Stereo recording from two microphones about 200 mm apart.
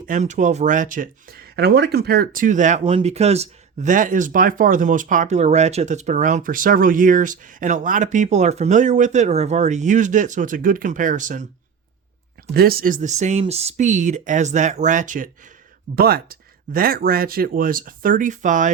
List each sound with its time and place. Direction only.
0.0 s speech: 40° right (ahead or behind)
12.5 s speech: 50° right (ahead or behind)